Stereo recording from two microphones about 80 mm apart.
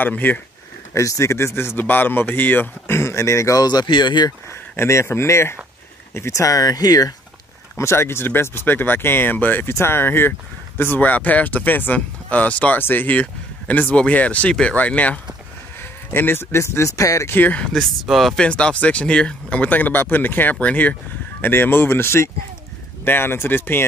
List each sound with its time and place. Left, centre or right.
0.0 s speech: left
0.9 s speech: left
3.6 s speech: left
4.7 s speech: left
7.7 s speech: left
17.3 s speech: left
18.0 s speech: centre
18.4 s speech: centre; by 23.9 s left